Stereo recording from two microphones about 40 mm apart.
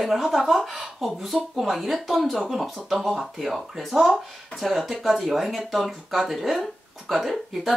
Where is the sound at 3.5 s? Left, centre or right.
Centre.